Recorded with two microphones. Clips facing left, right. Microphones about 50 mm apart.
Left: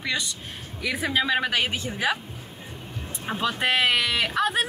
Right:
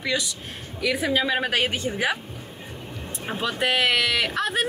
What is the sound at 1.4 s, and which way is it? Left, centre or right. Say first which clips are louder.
Speech: right 2 dB; right.